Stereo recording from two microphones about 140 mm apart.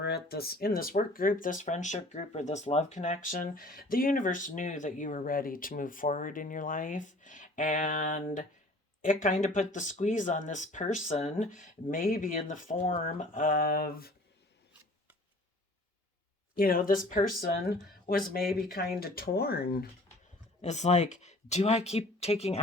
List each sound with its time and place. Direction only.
0.3 s speech: 90° left
16.6 s speech: 90° left
20.6 s speech: 55° left (ahead or behind)